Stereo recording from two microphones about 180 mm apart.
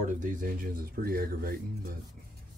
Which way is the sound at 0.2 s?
50° right (ahead or behind).